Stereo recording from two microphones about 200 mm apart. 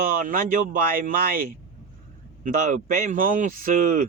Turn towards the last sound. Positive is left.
turn(degrees=-45)  # may be behind; listen again after turning